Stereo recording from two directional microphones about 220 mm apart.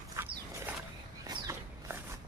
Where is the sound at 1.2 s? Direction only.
15° right (ahead or behind).